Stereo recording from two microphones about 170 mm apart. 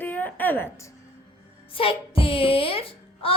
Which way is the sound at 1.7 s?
35° left (ahead or behind).